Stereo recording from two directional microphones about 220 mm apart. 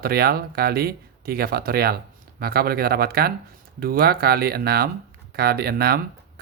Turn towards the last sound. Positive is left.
turn(degrees=-45)  # may be behind; listen again after turning